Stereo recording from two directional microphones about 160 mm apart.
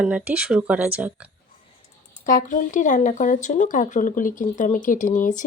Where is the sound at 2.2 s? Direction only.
55° left (ahead or behind).